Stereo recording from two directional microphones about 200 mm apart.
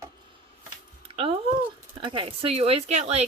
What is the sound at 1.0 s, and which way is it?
Speech, 30° right (ahead or behind).